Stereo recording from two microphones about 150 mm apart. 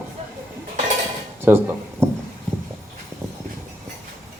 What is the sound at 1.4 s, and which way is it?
Speech, 15° right (ahead or behind).